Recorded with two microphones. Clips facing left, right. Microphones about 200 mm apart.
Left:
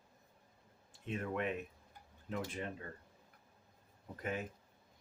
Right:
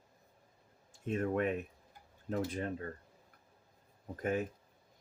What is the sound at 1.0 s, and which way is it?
Speech, 45° right (ahead or behind).